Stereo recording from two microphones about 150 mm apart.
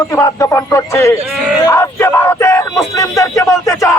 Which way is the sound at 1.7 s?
15° left (ahead or behind).